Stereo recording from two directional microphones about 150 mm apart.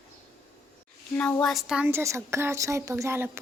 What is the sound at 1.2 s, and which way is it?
A woman's voice, 10° left (ahead or behind).